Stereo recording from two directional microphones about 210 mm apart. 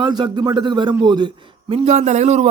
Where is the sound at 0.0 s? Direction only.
20° right (ahead or behind).